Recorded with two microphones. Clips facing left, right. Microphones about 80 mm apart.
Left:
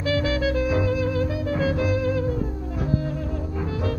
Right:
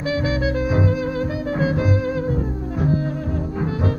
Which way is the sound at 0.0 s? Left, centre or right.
Centre.